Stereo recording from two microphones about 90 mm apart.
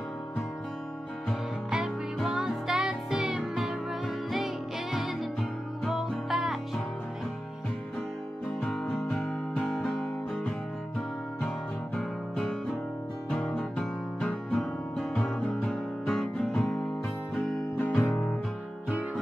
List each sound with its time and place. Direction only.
2.1 s music: 5° right (ahead or behind)
4.9 s music: 5° right (ahead or behind)
8.7 s music: 5° left (ahead or behind)
11.0 s music: 5° left (ahead or behind)
17.7 s music: 20° left (ahead or behind)